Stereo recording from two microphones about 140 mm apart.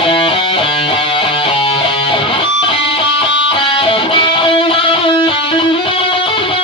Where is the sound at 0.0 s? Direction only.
40° left (ahead or behind).